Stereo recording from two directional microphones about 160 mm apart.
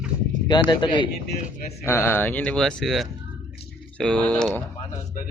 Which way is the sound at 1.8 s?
15° left (ahead or behind).